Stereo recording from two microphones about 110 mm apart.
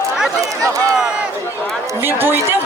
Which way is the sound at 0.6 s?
30° right (ahead or behind).